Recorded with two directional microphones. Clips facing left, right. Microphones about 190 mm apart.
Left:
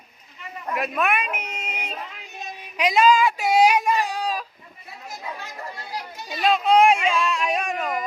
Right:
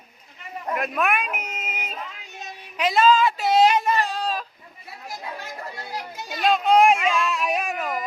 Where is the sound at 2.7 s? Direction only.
10° left (ahead or behind).